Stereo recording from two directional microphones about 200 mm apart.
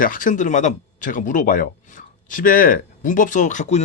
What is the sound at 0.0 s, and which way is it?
Speech, 40° left (ahead or behind).